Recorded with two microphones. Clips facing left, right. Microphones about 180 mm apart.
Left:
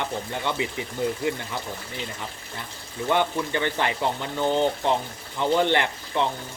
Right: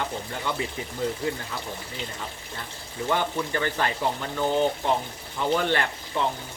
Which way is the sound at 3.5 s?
20° left (ahead or behind).